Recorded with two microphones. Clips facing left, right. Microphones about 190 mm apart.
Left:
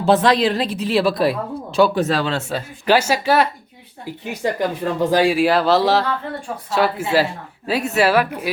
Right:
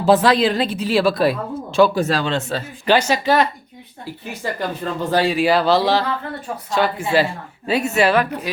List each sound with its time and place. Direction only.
0.0 s a woman's voice: centre (ahead or behind)